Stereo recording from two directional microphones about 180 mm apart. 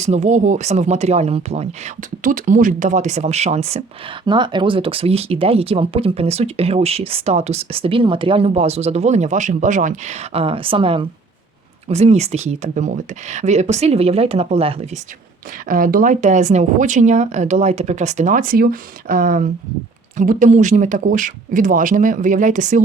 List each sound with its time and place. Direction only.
0.0 s speech: 40° right (ahead or behind)
15.6 s speech: 50° right (ahead or behind)